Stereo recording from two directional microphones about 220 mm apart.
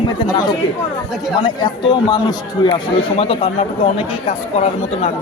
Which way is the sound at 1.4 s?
20° left (ahead or behind).